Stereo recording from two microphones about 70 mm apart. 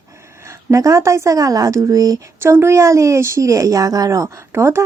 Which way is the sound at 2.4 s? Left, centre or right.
Right.